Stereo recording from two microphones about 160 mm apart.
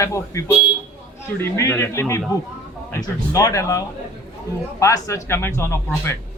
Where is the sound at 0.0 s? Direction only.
20° left (ahead or behind).